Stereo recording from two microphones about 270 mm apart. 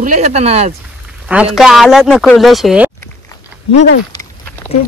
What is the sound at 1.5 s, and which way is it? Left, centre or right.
Speech, centre.